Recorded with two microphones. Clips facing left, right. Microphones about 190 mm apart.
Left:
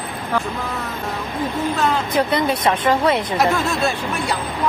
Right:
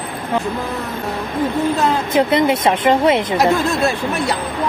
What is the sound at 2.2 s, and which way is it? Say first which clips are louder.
Speech: right 6 dB; 20° right (ahead or behind).